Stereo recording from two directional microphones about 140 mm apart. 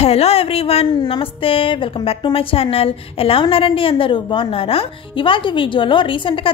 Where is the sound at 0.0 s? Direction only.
45° left (ahead or behind).